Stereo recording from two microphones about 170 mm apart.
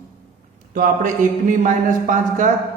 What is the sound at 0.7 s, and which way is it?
Speech, 50° right (ahead or behind).